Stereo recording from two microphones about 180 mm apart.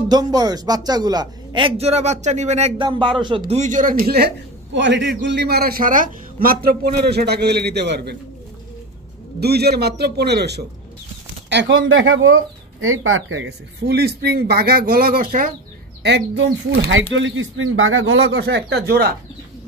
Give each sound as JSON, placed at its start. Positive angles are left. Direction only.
{"t": 0.1, "sound": "a man's voice", "side_deg": -20}
{"t": 3.5, "sound": "speech", "side_deg": -45}
{"t": 4.7, "sound": "a man's voice", "side_deg": -80}
{"t": 9.4, "sound": "a man's voice", "side_deg": -65}
{"t": 11.4, "sound": "a man's voice", "side_deg": -80}
{"t": 16.0, "sound": "speech", "side_deg": -70}